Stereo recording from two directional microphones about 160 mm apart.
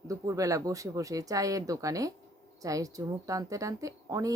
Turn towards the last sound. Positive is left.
turn(degrees=-20)  # may be behind; listen again after turning